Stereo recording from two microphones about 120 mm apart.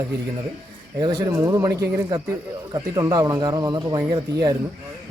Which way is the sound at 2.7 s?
30° right (ahead or behind).